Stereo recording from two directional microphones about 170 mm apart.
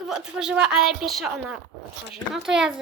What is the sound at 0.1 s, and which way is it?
A woman's voice, 5° right (ahead or behind).